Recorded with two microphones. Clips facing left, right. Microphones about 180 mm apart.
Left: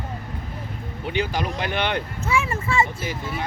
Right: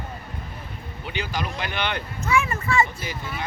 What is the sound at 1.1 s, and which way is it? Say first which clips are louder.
Speech: left 4 dB; 55° left (ahead or behind).